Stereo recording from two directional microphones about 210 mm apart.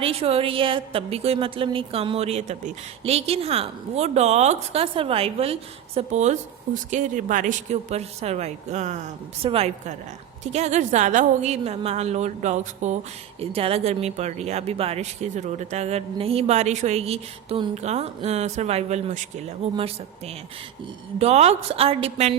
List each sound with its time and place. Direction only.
0.0 s a woman's voice: 30° right (ahead or behind)